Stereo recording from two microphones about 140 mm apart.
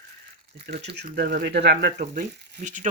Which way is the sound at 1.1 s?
90° right.